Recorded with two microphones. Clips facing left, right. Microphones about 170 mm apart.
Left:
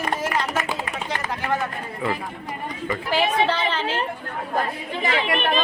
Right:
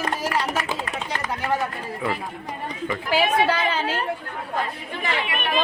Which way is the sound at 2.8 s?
5° right (ahead or behind).